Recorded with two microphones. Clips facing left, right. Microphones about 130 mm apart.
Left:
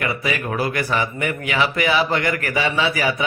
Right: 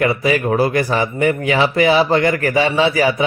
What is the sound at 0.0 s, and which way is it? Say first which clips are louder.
Speech: right 8 dB; 35° right (ahead or behind).